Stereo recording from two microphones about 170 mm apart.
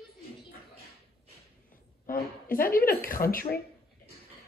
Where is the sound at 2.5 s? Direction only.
55° left (ahead or behind).